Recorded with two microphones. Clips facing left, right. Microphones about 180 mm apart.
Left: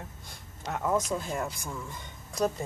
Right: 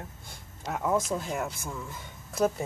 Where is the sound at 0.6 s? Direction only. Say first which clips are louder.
Right 1 dB; 5° right (ahead or behind).